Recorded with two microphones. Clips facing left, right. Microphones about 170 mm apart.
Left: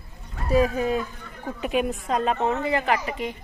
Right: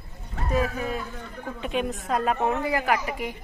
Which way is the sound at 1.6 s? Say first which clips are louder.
Left 3 dB; 5° left (ahead or behind).